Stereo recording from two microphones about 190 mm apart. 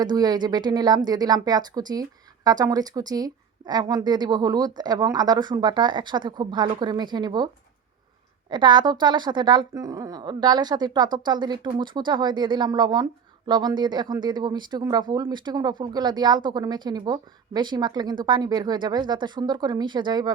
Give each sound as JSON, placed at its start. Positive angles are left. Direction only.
{"t": 0.0, "sound": "speech", "side_deg": -20}